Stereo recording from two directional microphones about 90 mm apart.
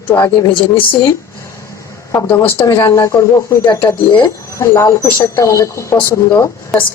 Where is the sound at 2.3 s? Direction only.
35° left (ahead or behind).